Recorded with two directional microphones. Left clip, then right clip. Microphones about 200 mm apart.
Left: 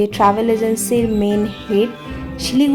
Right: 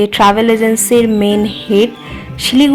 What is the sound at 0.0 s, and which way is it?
A woman's voice, 15° right (ahead or behind).